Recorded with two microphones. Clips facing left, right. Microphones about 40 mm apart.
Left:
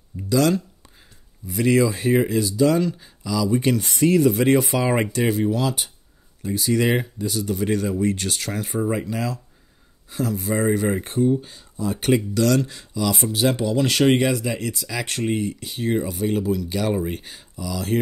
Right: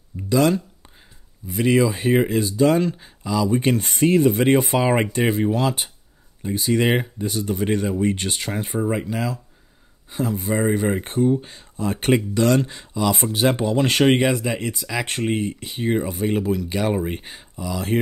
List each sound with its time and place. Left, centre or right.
0.3 s speech: right
5.5 s speech: right
11.4 s speech: right